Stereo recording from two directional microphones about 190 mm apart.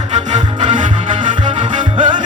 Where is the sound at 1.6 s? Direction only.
25° right (ahead or behind).